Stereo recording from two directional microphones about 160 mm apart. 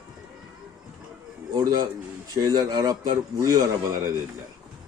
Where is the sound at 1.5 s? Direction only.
25° right (ahead or behind).